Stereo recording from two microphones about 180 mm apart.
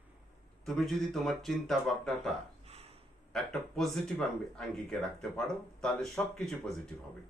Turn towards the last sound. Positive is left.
turn(degrees=0)  # may be behind; listen again after turning